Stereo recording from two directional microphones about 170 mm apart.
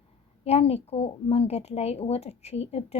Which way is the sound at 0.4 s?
40° left (ahead or behind).